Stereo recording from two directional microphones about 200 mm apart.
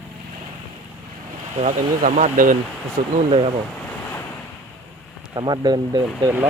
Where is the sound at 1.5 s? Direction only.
35° right (ahead or behind).